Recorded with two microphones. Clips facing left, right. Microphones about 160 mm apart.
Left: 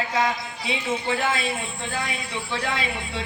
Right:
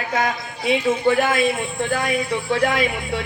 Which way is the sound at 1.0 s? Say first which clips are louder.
Right 8 dB; 50° right (ahead or behind).